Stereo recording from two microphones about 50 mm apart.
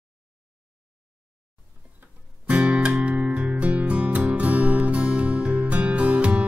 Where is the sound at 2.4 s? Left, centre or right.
Right.